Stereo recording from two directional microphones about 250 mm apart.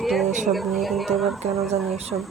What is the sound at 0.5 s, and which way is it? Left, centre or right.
Speech, centre.